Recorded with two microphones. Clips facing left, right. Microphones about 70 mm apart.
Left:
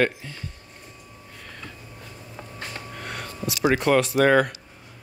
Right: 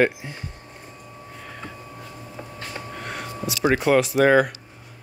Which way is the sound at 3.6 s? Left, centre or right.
Centre.